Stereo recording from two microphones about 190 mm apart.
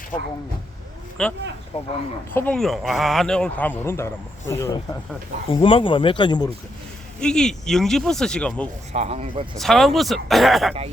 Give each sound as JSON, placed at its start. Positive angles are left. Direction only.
{"t": 0.1, "sound": "speech", "side_deg": 25}
{"t": 1.2, "sound": "speech", "side_deg": 5}
{"t": 1.7, "sound": "speech", "side_deg": 30}
{"t": 2.3, "sound": "a man's voice", "side_deg": 10}
{"t": 5.5, "sound": "speech", "side_deg": 30}
{"t": 7.2, "sound": "speech", "side_deg": 5}
{"t": 8.9, "sound": "speech", "side_deg": -35}
{"t": 9.6, "sound": "speech", "side_deg": 0}